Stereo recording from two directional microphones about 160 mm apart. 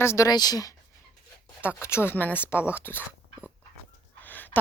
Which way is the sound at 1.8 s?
15° left (ahead or behind).